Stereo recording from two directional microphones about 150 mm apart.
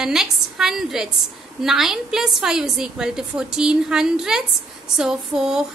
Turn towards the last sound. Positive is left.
turn(degrees=-5)  # may be behind; listen again after turning